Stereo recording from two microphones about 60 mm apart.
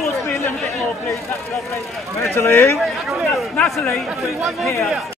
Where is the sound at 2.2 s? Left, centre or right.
Left.